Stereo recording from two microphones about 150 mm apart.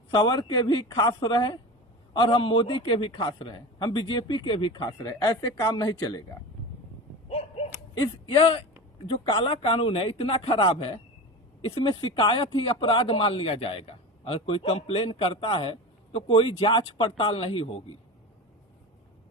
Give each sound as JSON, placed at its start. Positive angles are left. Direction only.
{"t": 0.1, "sound": "speech", "side_deg": 30}
{"t": 7.3, "sound": "a sound", "side_deg": 40}
{"t": 9.0, "sound": "speech", "side_deg": 35}